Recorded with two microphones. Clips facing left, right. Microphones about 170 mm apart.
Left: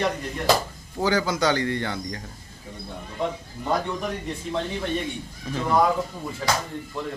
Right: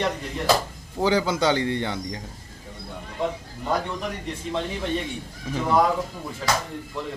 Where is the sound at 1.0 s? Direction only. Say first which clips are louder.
Right 1 dB; 25° right (ahead or behind).